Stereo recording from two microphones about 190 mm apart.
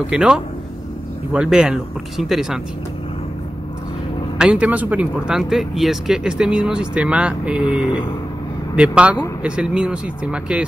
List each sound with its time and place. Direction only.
0.1 s speech: 5° right (ahead or behind)
4.4 s speech: 5° right (ahead or behind)
7.8 s speech: 25° left (ahead or behind)
8.7 s a man's voice: 5° right (ahead or behind)